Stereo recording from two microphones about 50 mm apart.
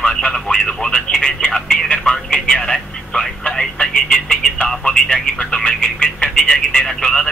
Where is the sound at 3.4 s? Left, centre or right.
Centre.